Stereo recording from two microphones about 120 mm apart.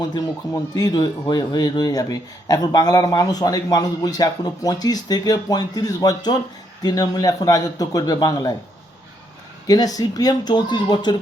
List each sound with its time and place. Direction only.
0.0 s speech: 30° left (ahead or behind)
9.6 s speech: 30° left (ahead or behind)